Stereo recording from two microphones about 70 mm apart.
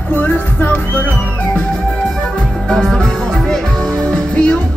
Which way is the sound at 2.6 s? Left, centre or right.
Centre.